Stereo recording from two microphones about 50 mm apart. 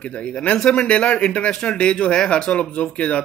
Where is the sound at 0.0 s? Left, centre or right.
Left.